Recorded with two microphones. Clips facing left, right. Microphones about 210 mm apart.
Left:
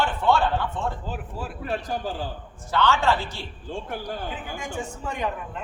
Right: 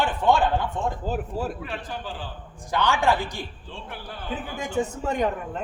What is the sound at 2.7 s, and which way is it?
Speech, 15° right (ahead or behind).